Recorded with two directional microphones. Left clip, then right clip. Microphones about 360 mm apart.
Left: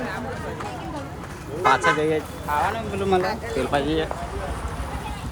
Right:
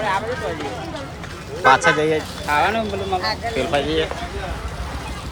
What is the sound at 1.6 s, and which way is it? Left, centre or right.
Speech, centre.